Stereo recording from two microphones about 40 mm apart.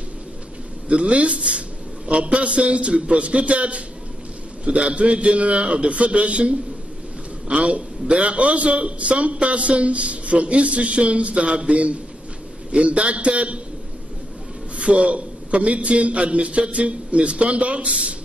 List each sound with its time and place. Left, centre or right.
0.8 s a man's voice: right
14.8 s a man's voice: right